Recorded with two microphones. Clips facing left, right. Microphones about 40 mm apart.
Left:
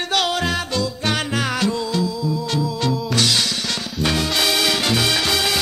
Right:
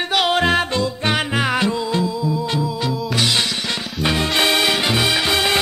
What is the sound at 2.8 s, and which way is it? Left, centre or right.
Music, centre.